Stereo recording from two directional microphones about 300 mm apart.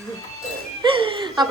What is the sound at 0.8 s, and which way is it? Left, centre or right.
Music, centre.